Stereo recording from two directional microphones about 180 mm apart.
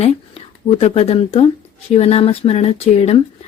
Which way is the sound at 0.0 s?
35° left (ahead or behind).